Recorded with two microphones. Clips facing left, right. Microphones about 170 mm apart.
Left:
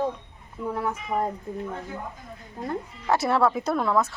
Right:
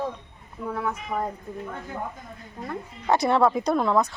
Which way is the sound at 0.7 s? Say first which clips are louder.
Left 1 dB; 25° left (ahead or behind).